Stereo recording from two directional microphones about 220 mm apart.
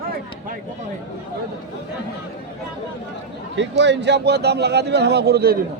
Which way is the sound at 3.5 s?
55° right (ahead or behind).